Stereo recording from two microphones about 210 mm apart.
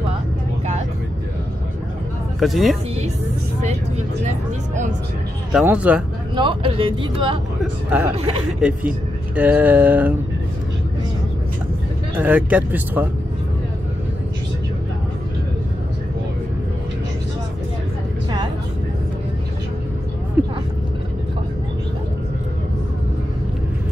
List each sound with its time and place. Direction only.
2.4 s speech: centre (ahead or behind)
5.5 s speech: 5° right (ahead or behind)
6.3 s speech: 25° right (ahead or behind)
8.5 s speech: 5° right (ahead or behind)
12.2 s speech: 10° right (ahead or behind)
20.4 s speech: 10° right (ahead or behind)